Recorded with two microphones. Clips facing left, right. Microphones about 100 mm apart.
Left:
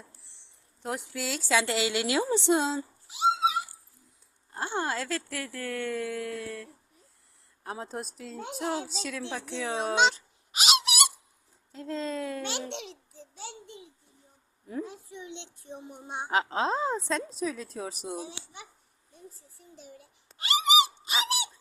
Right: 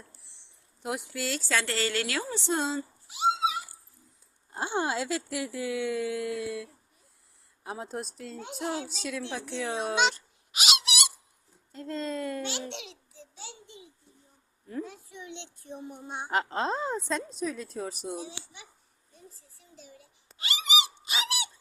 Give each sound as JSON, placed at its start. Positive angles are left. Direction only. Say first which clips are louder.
{"t": 0.3, "sound": "speech", "louder": "even", "side_deg": -5}
{"t": 2.6, "sound": "a woman's voice", "louder": "left 2 dB", "side_deg": 0}
{"t": 4.5, "sound": "a woman's voice", "louder": "right 1 dB", "side_deg": -15}
{"t": 10.5, "sound": "a sound", "louder": "left 3 dB", "side_deg": 40}
{"t": 11.7, "sound": "a woman's voice", "louder": "even", "side_deg": 0}
{"t": 12.5, "sound": "a child's voice", "louder": "left 1 dB", "side_deg": 50}
{"t": 14.8, "sound": "a sound", "louder": "left 1 dB", "side_deg": 30}
{"t": 16.3, "sound": "a woman's voice", "louder": "left 2 dB", "side_deg": 0}
{"t": 18.2, "sound": "a child's voice", "louder": "left 1 dB", "side_deg": 45}
{"t": 20.4, "sound": "a sound", "louder": "left 6 dB", "side_deg": 40}